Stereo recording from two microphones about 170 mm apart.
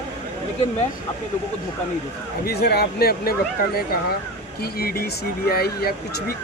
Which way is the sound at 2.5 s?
65° left (ahead or behind).